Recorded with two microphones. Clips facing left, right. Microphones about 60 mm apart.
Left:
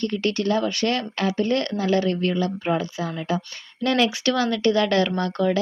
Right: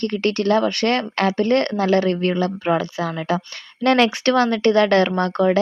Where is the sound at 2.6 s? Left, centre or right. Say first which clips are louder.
Right 4 dB; right.